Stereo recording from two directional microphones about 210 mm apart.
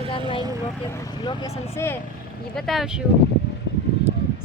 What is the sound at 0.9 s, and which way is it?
Speech, 15° left (ahead or behind).